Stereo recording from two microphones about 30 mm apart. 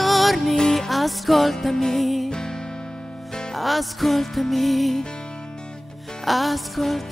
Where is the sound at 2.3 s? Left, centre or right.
Left.